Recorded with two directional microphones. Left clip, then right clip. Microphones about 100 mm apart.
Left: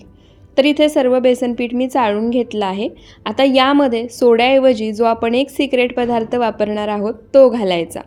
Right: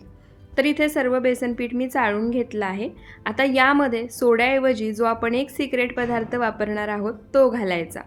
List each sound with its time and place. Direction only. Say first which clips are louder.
0.5 s a woman's voice: left 8 dB; 30° left (ahead or behind)
2.4 s a woman's voice: left 7 dB; 35° left (ahead or behind)